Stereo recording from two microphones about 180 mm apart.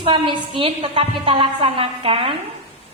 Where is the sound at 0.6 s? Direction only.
30° right (ahead or behind).